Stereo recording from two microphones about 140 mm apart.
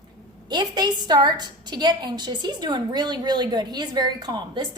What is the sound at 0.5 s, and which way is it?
A woman's voice, 30° right (ahead or behind).